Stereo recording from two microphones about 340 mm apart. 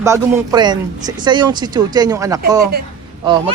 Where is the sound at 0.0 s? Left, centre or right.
Centre.